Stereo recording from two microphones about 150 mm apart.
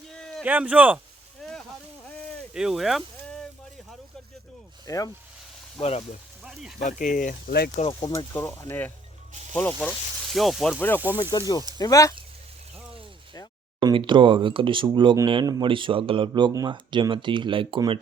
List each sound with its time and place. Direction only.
0.1 s a sound: 5° left (ahead or behind)
0.4 s a man's voice: 10° right (ahead or behind)
1.4 s a sound: centre (ahead or behind)
4.9 s speech: 25° left (ahead or behind)
5.8 s speech: 45° left (ahead or behind)
6.4 s sizzle: 5° right (ahead or behind)
6.7 s speech: 60° left (ahead or behind); by 7.7 s 80° left
7.8 s speech: 40° left (ahead or behind)
8.1 s speech: 25° left (ahead or behind)
8.4 s speech: 15° left (ahead or behind)
10.3 s speech: centre (ahead or behind)
10.8 s speech: 10° left (ahead or behind)
11.2 s speech: 25° left (ahead or behind)
13.8 s speech: 30° right (ahead or behind)